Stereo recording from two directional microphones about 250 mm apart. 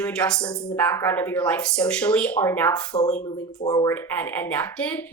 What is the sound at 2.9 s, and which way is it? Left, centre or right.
Speech, left.